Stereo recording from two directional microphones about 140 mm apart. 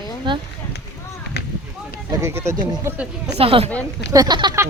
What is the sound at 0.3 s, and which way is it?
Speech, 35° right (ahead or behind).